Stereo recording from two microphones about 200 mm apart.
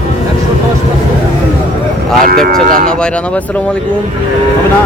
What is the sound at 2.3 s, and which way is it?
Speech, 45° right (ahead or behind).